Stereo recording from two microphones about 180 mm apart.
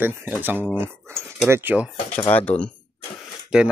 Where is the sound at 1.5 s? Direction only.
10° right (ahead or behind).